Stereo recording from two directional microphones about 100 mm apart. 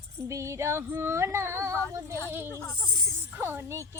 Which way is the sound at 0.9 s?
25° right (ahead or behind).